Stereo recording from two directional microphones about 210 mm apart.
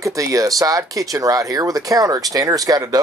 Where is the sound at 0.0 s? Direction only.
15° right (ahead or behind).